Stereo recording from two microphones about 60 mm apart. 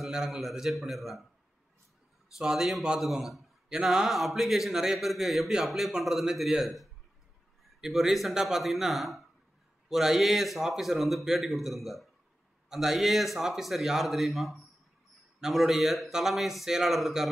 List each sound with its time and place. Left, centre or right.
0.0 s speech: centre
2.3 s speech: centre